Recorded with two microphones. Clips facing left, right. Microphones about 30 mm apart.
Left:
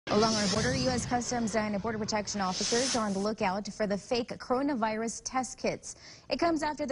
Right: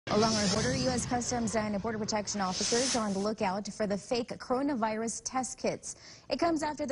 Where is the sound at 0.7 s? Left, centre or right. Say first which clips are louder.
Left 1 dB; left.